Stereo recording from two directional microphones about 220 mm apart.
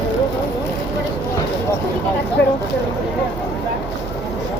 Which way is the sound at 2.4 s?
55° left (ahead or behind).